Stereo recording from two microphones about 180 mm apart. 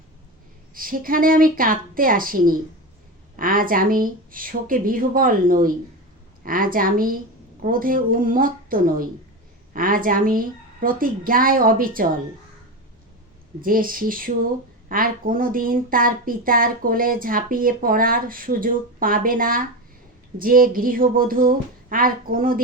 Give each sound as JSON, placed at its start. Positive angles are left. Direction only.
{"t": 0.7, "sound": "speech", "side_deg": -50}
{"t": 13.6, "sound": "speech", "side_deg": -50}